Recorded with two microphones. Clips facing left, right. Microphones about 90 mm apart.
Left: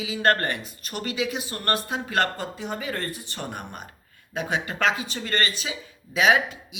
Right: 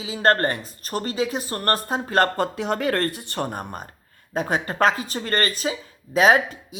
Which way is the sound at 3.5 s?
40° right (ahead or behind).